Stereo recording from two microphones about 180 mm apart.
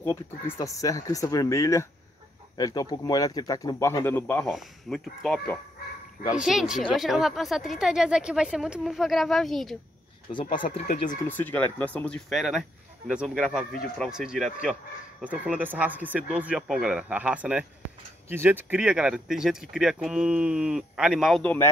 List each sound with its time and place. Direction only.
0.0 s speech: 15° left (ahead or behind)
10.3 s speech: 25° left (ahead or behind)
11.2 s speech: 10° left (ahead or behind)